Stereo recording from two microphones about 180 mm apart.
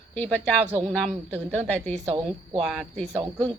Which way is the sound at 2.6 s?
Centre (ahead or behind).